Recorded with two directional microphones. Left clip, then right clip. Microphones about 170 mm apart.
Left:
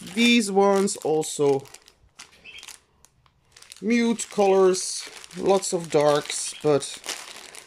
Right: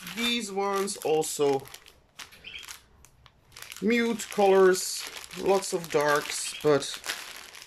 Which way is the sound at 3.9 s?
15° left (ahead or behind).